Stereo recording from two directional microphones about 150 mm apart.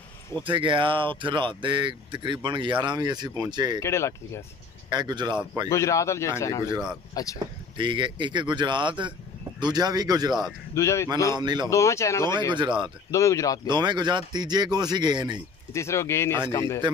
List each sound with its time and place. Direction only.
0.5 s speech: 35° right (ahead or behind)
3.8 s speech: 20° left (ahead or behind)
4.8 s speech: 30° right (ahead or behind)
5.7 s speech: 20° left (ahead or behind)
7.7 s speech: 30° right (ahead or behind)
10.7 s speech: 20° left (ahead or behind)
11.3 s speech: 30° right (ahead or behind)
11.7 s speech: 20° left (ahead or behind)
12.4 s speech: 30° right (ahead or behind)
13.1 s speech: 20° left (ahead or behind)
13.7 s speech: 30° right (ahead or behind)
15.7 s speech: 20° left (ahead or behind)